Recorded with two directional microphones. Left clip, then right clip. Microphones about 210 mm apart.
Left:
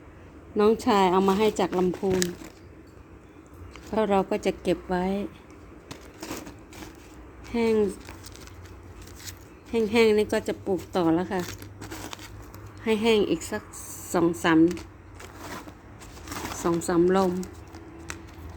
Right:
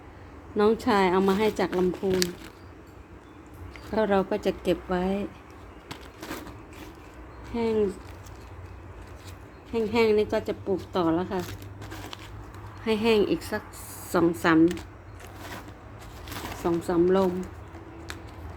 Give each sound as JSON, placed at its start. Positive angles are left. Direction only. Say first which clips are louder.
{"t": 0.5, "sound": "a woman's voice", "louder": "left 1 dB", "side_deg": 10}
{"t": 3.9, "sound": "a woman's voice", "louder": "even", "side_deg": 10}
{"t": 7.5, "sound": "a woman's voice", "louder": "left 2 dB", "side_deg": 20}
{"t": 9.7, "sound": "a woman's voice", "louder": "left 2 dB", "side_deg": 20}
{"t": 12.8, "sound": "a woman's voice", "louder": "left 1 dB", "side_deg": 10}
{"t": 14.6, "sound": "speech", "louder": "even", "side_deg": -10}
{"t": 16.3, "sound": "speech", "louder": "left 1 dB", "side_deg": 20}